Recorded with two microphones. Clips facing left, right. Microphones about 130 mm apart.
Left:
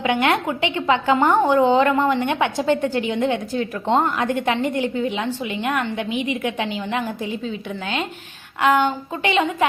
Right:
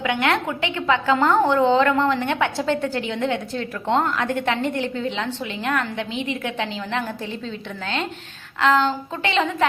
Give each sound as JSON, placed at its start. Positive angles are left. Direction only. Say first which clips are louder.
{"t": 0.0, "sound": "a woman's voice", "louder": "left 2 dB", "side_deg": 25}